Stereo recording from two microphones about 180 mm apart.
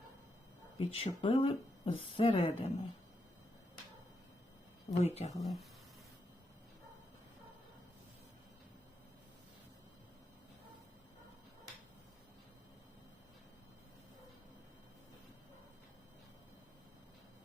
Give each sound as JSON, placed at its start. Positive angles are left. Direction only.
{"t": 0.8, "sound": "speech", "side_deg": 35}
{"t": 4.9, "sound": "speech", "side_deg": 40}
{"t": 5.4, "sound": "speech", "side_deg": 0}